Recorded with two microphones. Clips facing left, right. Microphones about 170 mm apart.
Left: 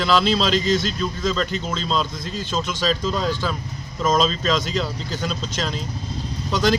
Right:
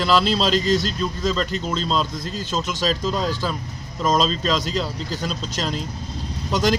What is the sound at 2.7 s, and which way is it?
Speech, 40° right (ahead or behind).